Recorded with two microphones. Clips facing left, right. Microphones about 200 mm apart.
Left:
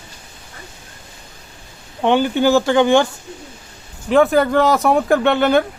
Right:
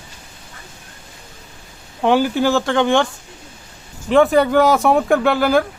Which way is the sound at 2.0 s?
5° right (ahead or behind).